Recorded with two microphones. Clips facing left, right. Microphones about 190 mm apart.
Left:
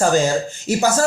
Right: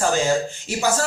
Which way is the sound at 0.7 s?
40° left (ahead or behind).